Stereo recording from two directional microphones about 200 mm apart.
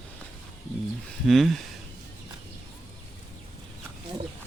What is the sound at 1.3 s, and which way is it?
Speech, centre (ahead or behind).